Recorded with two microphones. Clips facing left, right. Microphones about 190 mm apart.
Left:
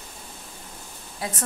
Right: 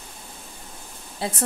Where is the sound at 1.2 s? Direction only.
30° right (ahead or behind).